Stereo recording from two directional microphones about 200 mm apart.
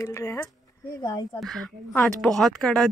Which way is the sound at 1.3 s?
Centre (ahead or behind).